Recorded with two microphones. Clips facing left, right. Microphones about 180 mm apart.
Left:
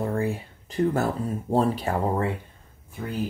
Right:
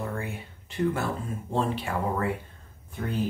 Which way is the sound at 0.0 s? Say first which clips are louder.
Left 7 dB; 35° left (ahead or behind).